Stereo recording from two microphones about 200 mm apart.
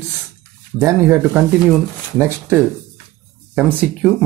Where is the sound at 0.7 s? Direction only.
15° right (ahead or behind).